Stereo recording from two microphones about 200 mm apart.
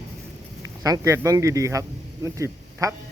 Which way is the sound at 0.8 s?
15° right (ahead or behind).